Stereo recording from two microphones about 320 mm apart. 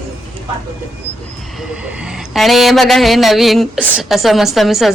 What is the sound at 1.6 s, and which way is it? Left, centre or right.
Speech, centre.